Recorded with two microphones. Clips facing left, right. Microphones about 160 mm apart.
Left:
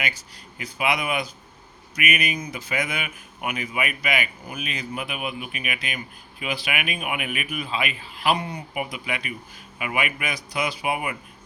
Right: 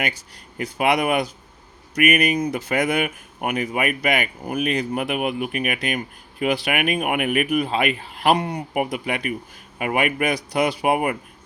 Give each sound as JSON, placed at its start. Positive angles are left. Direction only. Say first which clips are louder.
{"t": 0.5, "sound": "speech", "louder": "right 5 dB", "side_deg": -55}
{"t": 7.0, "sound": "speech", "louder": "right 8 dB", "side_deg": -60}
{"t": 8.7, "sound": "speech", "louder": "right 6 dB", "side_deg": -50}